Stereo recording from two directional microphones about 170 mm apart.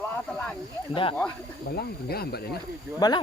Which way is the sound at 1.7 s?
65° left (ahead or behind).